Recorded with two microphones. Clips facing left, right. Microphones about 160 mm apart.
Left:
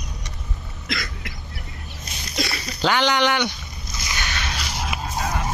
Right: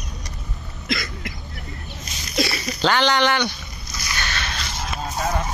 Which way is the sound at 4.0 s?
15° left (ahead or behind).